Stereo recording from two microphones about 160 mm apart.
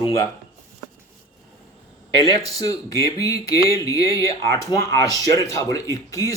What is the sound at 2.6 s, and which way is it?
Speech, 20° left (ahead or behind).